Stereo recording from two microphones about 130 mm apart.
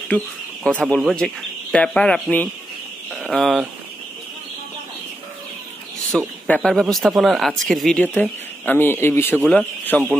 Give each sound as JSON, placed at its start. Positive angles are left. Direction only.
{"t": 0.7, "sound": "speech", "side_deg": 10}
{"t": 6.1, "sound": "speech", "side_deg": 10}
{"t": 8.0, "sound": "speech", "side_deg": 15}